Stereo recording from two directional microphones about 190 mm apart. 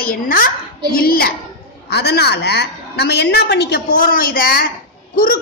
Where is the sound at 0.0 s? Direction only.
50° left (ahead or behind).